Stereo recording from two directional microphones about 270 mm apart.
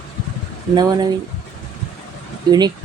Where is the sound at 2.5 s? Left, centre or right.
Centre.